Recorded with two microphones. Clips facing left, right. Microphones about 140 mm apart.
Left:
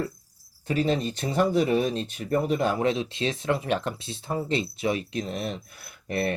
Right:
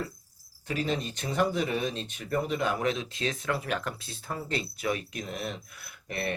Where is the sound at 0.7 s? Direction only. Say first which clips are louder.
Left 6 dB; 35° left (ahead or behind).